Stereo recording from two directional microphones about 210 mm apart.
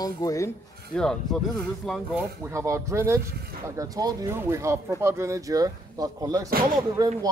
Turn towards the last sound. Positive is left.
turn(degrees=-20)  # may be behind; listen again after turning